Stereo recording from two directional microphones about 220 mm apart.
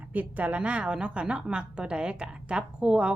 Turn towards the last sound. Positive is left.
turn(degrees=-5)  # may be behind; listen again after turning